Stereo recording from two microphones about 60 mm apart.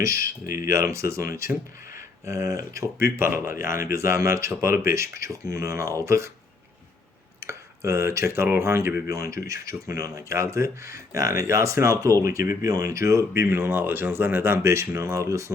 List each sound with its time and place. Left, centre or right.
0.0 s speech: right
7.4 s speech: right
9.0 s speech: right